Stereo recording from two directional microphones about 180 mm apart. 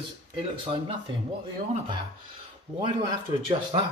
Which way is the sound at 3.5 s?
25° right (ahead or behind).